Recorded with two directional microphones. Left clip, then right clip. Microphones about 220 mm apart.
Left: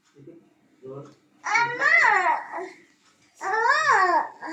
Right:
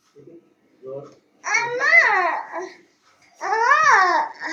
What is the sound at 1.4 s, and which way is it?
Babbling, centre (ahead or behind).